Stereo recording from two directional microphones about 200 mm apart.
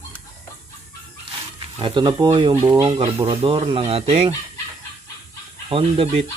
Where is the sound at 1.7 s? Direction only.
25° right (ahead or behind).